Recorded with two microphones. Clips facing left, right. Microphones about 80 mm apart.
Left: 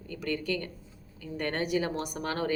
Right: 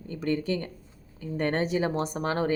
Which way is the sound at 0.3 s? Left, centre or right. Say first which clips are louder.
Right 4 dB; right.